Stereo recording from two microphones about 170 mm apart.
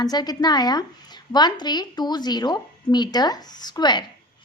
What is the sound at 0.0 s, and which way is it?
A woman's voice, 25° left (ahead or behind).